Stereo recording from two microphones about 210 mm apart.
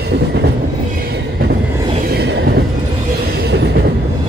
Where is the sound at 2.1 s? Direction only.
50° right (ahead or behind).